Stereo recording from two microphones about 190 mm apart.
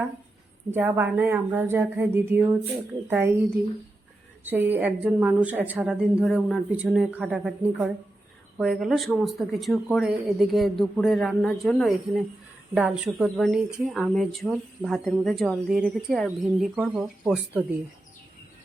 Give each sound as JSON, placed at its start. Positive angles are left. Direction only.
{"t": 0.7, "sound": "a woman's voice", "side_deg": -10}
{"t": 4.4, "sound": "a woman's voice", "side_deg": -10}